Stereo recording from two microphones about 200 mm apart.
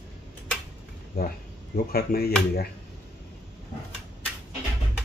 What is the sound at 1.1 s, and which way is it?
Speech, 45° left (ahead or behind).